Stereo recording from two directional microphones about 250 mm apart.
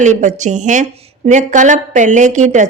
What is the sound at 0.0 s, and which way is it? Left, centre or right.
A woman's voice, right.